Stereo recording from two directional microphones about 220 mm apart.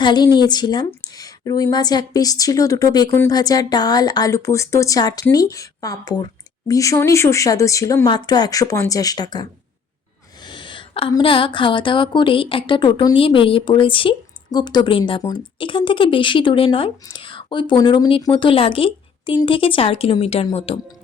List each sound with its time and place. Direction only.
0.0 s a woman's voice: 20° left (ahead or behind)